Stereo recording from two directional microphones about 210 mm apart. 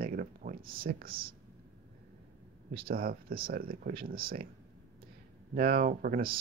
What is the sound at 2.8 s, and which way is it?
Speech, 45° right (ahead or behind).